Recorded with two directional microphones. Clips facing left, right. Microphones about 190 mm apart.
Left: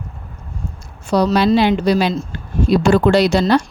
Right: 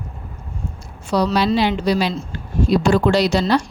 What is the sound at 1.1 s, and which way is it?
A woman's voice, 45° left (ahead or behind).